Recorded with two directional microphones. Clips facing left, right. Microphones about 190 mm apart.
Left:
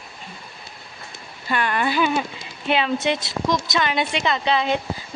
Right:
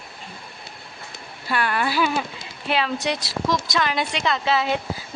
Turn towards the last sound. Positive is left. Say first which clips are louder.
# left 1 dB
turn(degrees=-5)  # may be behind; listen again after turning